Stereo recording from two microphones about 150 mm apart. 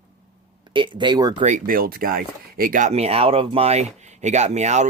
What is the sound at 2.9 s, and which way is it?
Speech, 45° right (ahead or behind).